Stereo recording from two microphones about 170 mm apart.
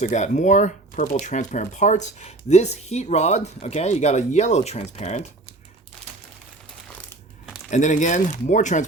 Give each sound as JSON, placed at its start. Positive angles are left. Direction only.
{"t": 0.0, "sound": "speech", "side_deg": 45}
{"t": 7.7, "sound": "speech", "side_deg": 45}